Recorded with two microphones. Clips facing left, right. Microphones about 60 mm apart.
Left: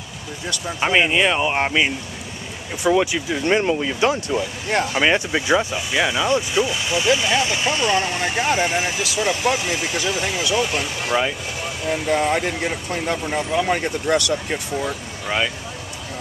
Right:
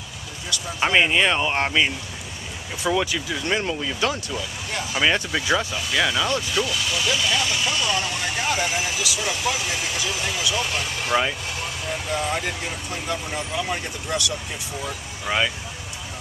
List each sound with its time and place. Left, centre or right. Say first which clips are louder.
0.7 s speech: left 1 dB; centre; by 4.4 s left
4.4 s speech: left 8 dB; left
4.9 s speech: even; centre
11.1 s speech: left 1 dB; centre
12.1 s speech: left 6 dB; left
13.7 s speech: left 8 dB; left
15.2 s speech: left 1 dB; centre